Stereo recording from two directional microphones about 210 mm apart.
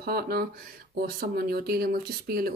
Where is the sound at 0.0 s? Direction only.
45° right (ahead or behind).